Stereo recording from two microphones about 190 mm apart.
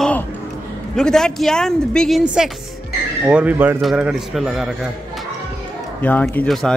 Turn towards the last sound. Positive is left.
turn(degrees=0)  # may be behind; listen again after turning